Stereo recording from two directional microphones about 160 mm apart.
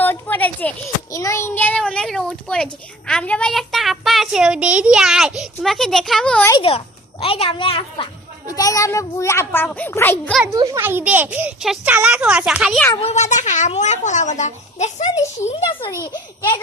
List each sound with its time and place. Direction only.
0.0 s a sound: 10° left (ahead or behind)
3.1 s speech: 5° left (ahead or behind)
6.5 s a woman's voice: 35° left (ahead or behind)
8.4 s a child's voice: 20° left (ahead or behind)
10.4 s a child's voice: 20° right (ahead or behind); by 12.8 s 5° right (ahead or behind)
12.9 s speech: 35° left (ahead or behind)
15.9 s a child's voice: 20° left (ahead or behind)